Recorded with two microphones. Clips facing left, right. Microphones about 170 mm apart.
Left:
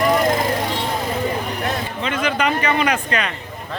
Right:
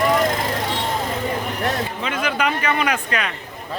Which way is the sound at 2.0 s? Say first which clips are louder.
Left 2 dB; 5° right (ahead or behind).